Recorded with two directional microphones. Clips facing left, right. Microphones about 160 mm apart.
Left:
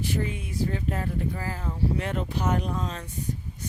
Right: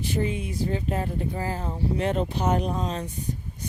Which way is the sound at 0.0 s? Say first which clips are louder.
Right 3 dB; 20° right (ahead or behind).